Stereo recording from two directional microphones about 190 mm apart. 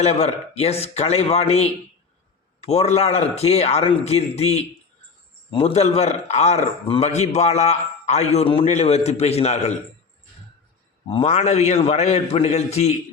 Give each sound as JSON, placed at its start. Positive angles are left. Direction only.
{"t": 0.0, "sound": "a man's voice", "side_deg": 35}
{"t": 11.1, "sound": "a man's voice", "side_deg": 35}